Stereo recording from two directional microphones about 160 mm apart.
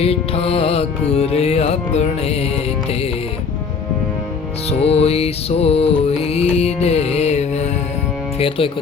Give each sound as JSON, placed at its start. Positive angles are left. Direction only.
{"t": 0.0, "sound": "music", "side_deg": 40}
{"t": 4.8, "sound": "music", "side_deg": 40}